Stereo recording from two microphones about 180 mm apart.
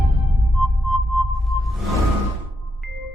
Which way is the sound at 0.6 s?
Centre (ahead or behind).